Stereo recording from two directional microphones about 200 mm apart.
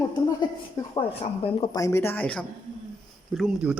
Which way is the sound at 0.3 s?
25° left (ahead or behind).